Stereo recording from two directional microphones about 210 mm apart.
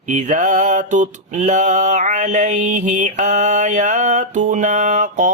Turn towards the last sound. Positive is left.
turn(degrees=-35)  # may be behind; listen again after turning